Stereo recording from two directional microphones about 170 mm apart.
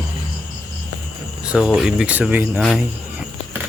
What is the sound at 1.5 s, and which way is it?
Speech, 5° right (ahead or behind).